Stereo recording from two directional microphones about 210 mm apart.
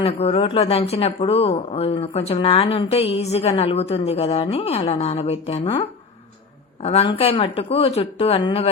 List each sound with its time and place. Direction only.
0.0 s speech: 30° left (ahead or behind)
6.8 s speech: 30° left (ahead or behind)